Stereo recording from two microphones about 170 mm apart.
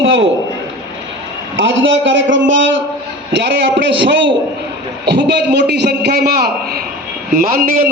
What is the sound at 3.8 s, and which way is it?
A man's voice, 90° right.